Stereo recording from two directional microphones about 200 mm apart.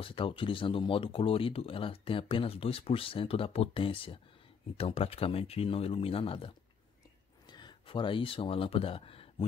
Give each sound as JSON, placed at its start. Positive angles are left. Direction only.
{"t": 0.0, "sound": "speech", "side_deg": 25}